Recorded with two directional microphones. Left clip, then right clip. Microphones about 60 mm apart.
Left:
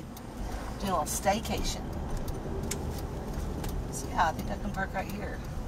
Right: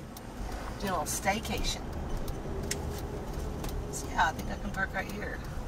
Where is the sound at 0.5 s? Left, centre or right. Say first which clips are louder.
Left 2 dB; centre.